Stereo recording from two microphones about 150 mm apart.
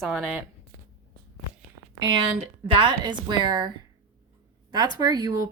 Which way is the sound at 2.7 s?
30° right (ahead or behind).